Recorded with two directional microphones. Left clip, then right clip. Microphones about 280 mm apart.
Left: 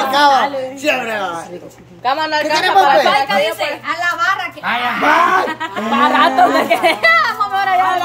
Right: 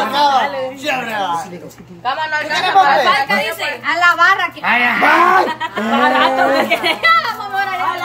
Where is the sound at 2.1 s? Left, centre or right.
Left.